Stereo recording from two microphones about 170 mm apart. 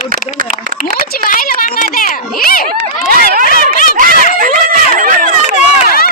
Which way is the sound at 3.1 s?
60° right (ahead or behind).